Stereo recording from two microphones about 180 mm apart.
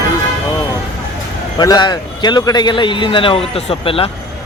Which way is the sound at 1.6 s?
25° left (ahead or behind).